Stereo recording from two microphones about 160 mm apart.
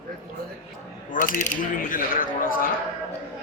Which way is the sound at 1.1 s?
55° left (ahead or behind).